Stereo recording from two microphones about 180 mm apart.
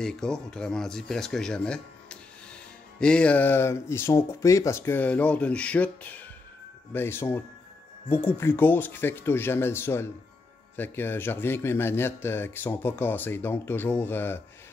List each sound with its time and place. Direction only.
0.0 s speech: 5° left (ahead or behind)